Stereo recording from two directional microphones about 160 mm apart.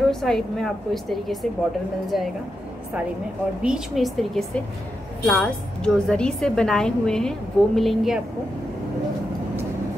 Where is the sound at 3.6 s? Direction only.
5° right (ahead or behind).